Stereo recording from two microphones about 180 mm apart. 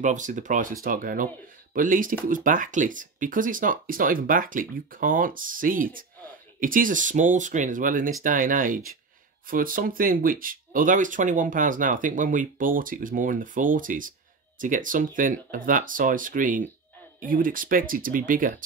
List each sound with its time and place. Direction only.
0.0 s speech: 45° right (ahead or behind)